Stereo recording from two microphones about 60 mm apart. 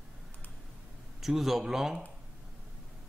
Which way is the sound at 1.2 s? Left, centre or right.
Centre.